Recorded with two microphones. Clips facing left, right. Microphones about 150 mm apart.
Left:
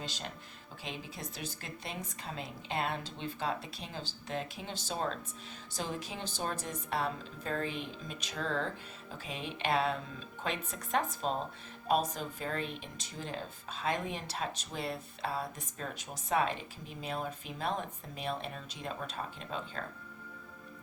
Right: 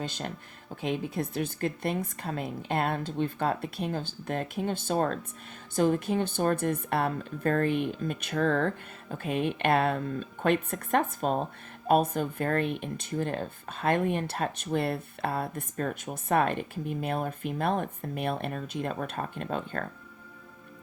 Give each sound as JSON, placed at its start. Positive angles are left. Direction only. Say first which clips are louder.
{"t": 0.0, "sound": "speech", "louder": "right 7 dB", "side_deg": -55}